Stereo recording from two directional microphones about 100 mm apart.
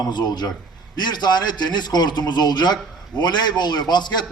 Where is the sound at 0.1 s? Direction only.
45° left (ahead or behind).